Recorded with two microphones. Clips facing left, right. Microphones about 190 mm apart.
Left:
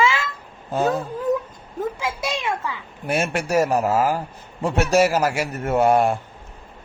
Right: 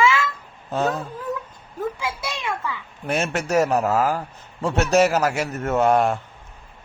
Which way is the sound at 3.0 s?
10° left (ahead or behind).